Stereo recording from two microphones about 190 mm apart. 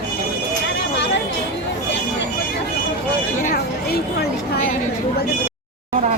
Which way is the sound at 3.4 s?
50° left (ahead or behind).